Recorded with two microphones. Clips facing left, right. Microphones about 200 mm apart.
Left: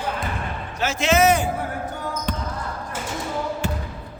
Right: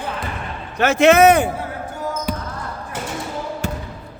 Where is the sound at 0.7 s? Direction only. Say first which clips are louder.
Right 8 dB; 60° right (ahead or behind).